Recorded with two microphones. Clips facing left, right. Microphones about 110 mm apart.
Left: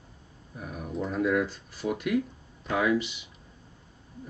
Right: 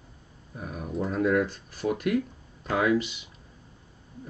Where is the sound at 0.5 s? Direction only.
45° right (ahead or behind).